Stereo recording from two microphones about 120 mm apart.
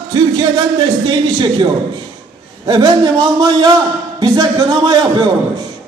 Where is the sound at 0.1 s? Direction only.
35° right (ahead or behind).